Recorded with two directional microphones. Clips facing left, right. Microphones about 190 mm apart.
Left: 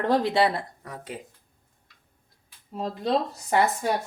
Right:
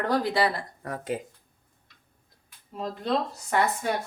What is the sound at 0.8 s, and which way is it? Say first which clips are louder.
Speech: right 7 dB; 45° right (ahead or behind).